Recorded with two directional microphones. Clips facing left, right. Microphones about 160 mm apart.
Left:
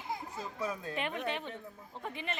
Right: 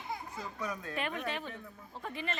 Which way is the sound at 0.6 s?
25° left (ahead or behind).